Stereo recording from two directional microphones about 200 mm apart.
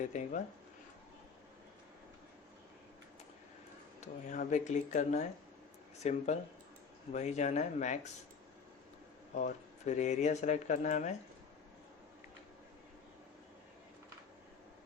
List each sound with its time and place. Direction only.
0.1 s speech: 40° left (ahead or behind)
4.0 s speech: 40° left (ahead or behind)
9.3 s speech: 35° left (ahead or behind)